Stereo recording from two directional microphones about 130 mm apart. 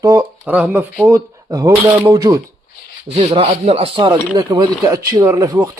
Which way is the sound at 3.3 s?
50° right (ahead or behind).